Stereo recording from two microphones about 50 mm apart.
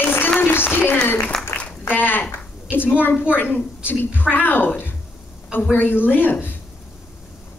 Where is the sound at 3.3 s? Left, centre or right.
Left.